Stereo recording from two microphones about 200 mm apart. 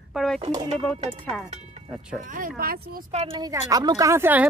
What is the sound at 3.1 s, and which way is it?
Speech, 20° right (ahead or behind).